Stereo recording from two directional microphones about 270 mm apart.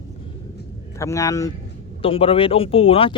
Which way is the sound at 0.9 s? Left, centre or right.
Centre.